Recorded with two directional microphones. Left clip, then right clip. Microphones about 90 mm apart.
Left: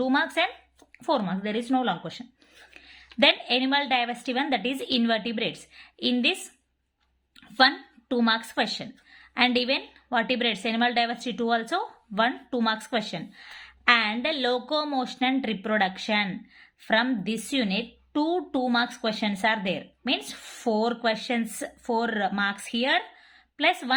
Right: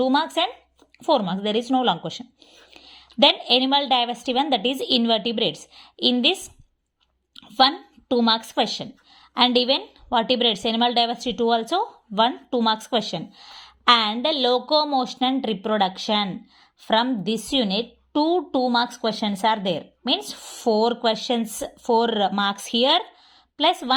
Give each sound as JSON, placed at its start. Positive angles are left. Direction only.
{"t": 0.0, "sound": "a woman's voice", "side_deg": -30}
{"t": 7.3, "sound": "a sound", "side_deg": -35}
{"t": 8.0, "sound": "a woman's voice", "side_deg": -30}
{"t": 14.5, "sound": "a woman's voice", "side_deg": -25}
{"t": 18.1, "sound": "a woman's voice", "side_deg": -25}